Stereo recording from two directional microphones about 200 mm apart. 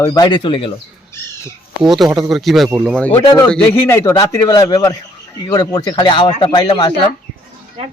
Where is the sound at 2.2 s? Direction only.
Centre (ahead or behind).